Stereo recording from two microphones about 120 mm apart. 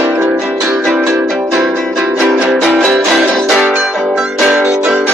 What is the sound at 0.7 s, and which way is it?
Music, 5° right (ahead or behind).